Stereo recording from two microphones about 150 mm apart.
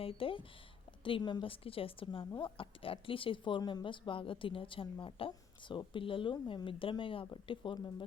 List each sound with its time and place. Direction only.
0.0 s speech: 40° left (ahead or behind)